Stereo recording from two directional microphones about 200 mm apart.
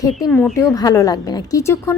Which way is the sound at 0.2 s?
5° left (ahead or behind).